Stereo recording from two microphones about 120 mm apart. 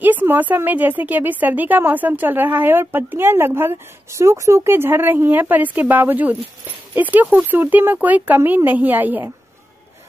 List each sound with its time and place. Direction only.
0.0 s a woman's voice: 15° right (ahead or behind)